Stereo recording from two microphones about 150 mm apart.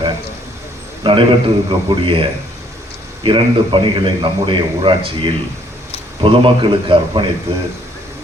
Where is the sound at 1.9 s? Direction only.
35° right (ahead or behind).